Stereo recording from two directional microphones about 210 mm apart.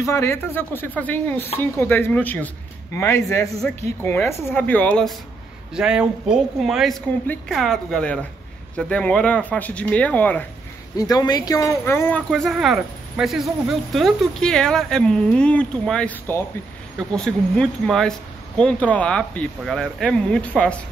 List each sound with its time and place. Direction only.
0.0 s speech: 15° left (ahead or behind)
11.0 s speech: 20° left (ahead or behind)
12.3 s speech: centre (ahead or behind)